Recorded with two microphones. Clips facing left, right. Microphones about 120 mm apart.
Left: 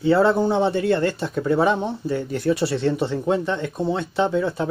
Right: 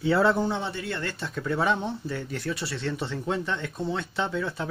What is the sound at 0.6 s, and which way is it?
Speech, 50° left (ahead or behind).